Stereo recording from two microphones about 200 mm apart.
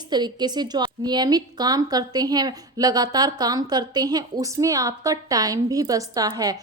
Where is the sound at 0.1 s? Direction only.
20° right (ahead or behind).